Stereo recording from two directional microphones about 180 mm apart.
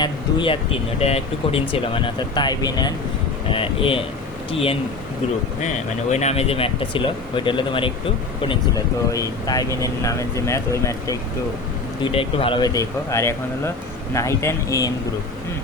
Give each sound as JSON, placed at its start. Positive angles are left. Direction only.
{"t": 0.0, "sound": "speech", "side_deg": 25}
{"t": 6.1, "sound": "speech", "side_deg": 35}
{"t": 12.1, "sound": "speech", "side_deg": 30}